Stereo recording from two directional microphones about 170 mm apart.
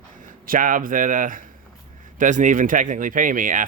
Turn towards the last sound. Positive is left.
turn(degrees=-50)  # may be behind; listen again after turning